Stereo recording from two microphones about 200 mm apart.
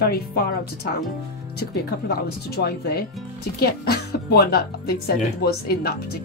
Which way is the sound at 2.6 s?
55° left (ahead or behind).